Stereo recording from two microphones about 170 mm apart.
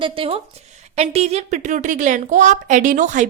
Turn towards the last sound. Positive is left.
turn(degrees=-45)  # may be behind; listen again after turning